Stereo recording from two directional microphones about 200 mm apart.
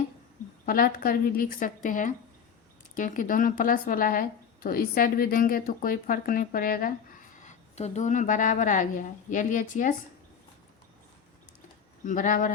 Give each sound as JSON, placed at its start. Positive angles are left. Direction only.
{"t": 0.6, "sound": "speech", "side_deg": 45}
{"t": 12.0, "sound": "speech", "side_deg": 40}